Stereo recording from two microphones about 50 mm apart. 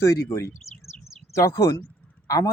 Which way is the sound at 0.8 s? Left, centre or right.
Left.